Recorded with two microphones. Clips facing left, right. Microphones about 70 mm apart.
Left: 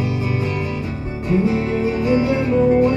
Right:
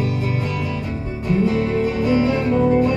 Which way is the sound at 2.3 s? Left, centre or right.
Centre.